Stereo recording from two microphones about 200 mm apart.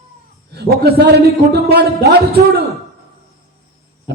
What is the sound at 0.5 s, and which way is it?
A man's voice, 50° right (ahead or behind).